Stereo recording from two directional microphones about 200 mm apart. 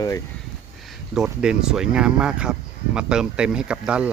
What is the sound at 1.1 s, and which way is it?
Speech, 5° right (ahead or behind).